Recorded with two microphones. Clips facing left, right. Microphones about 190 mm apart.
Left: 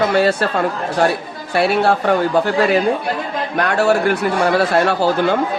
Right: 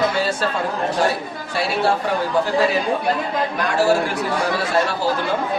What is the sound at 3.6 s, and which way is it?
Speech, 65° left (ahead or behind).